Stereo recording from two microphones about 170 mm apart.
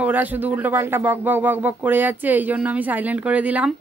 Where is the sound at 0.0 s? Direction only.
10° right (ahead or behind).